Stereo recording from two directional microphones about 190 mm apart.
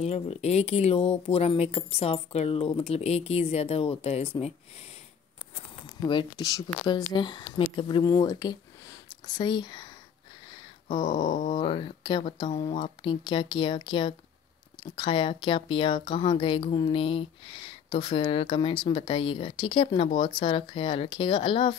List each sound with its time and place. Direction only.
0.0 s speech: 35° left (ahead or behind)
6.0 s speech: 20° left (ahead or behind)
10.9 s a sound: 20° left (ahead or behind)
11.1 s wail: 40° left (ahead or behind)
11.6 s speech: 25° left (ahead or behind)